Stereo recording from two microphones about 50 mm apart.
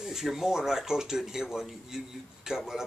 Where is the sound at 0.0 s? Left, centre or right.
Centre.